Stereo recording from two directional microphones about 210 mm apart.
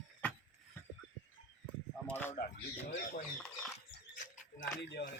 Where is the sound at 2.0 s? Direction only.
10° left (ahead or behind).